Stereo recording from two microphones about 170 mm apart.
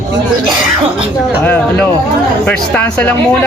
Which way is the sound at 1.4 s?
10° left (ahead or behind).